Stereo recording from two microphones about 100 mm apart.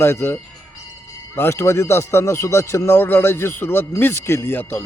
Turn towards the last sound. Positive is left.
turn(degrees=20)  # may be behind; listen again after turning